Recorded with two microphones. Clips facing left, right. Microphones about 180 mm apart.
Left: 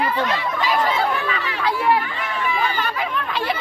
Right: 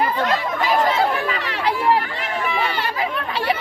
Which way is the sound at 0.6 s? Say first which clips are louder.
Right 2 dB; 45° right (ahead or behind).